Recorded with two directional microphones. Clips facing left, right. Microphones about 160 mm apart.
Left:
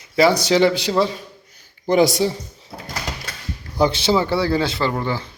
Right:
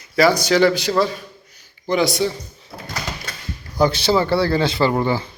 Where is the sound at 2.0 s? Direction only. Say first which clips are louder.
Left 3 dB; 40° left (ahead or behind).